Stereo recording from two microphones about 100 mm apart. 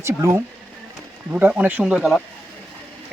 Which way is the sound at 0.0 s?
25° right (ahead or behind).